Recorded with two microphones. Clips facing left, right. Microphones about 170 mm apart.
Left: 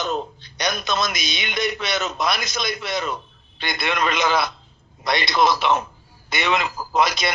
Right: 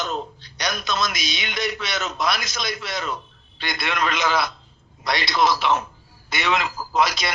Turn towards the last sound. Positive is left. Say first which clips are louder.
# left 1 dB
turn(degrees=20)  # may be behind; listen again after turning